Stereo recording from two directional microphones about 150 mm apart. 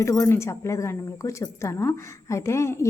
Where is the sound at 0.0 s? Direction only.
20° left (ahead or behind).